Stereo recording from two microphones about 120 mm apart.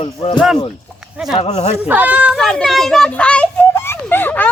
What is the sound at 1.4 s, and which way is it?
Speech, 65° left (ahead or behind).